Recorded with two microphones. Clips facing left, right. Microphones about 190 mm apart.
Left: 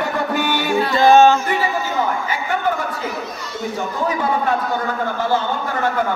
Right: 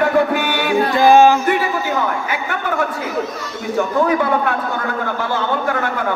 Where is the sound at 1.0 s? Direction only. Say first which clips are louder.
Right 1 dB; 10° right (ahead or behind).